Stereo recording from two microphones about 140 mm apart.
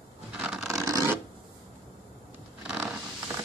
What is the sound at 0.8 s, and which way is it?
Rub, 20° right (ahead or behind).